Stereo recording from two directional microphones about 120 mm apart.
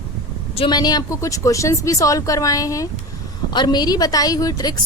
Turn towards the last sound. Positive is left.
turn(degrees=30)  # may be behind; listen again after turning